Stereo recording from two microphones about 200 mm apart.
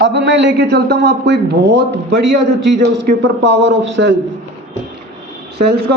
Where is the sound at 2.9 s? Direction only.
60° right (ahead or behind).